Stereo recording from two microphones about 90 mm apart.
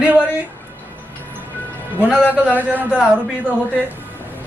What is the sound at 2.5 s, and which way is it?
Speech, 20° right (ahead or behind).